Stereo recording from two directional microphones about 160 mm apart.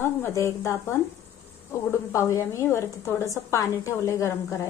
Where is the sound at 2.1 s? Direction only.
20° left (ahead or behind).